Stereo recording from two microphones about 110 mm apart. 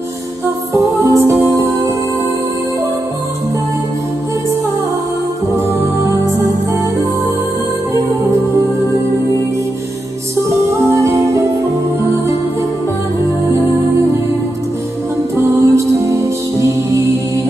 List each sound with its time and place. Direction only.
0.7 s music: 30° right (ahead or behind)
5.8 s music: 20° right (ahead or behind)
10.8 s music: 25° right (ahead or behind)
15.3 s music: 30° right (ahead or behind)